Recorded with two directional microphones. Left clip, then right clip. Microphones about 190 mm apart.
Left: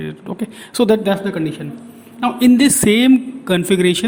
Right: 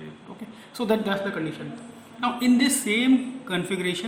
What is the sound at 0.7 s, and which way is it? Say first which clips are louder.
Speech: left 10 dB; 45° left (ahead or behind).